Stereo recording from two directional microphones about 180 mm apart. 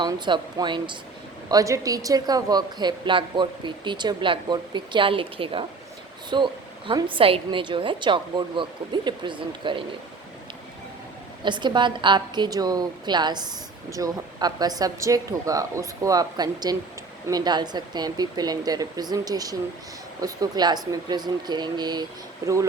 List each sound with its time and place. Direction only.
0.0 s a woman's voice: 25° right (ahead or behind)
11.4 s a woman's voice: 25° right (ahead or behind)